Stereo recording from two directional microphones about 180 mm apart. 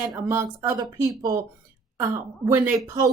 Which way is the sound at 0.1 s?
15° right (ahead or behind).